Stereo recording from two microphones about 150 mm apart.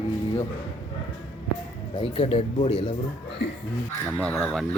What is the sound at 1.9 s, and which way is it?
Speech, 35° left (ahead or behind).